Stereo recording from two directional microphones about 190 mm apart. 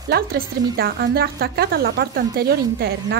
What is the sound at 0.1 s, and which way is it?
Speech, 55° right (ahead or behind).